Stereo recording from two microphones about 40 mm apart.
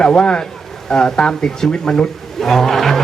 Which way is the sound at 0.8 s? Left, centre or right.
Centre.